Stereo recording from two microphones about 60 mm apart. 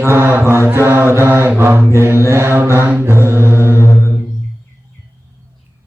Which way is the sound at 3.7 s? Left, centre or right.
Left.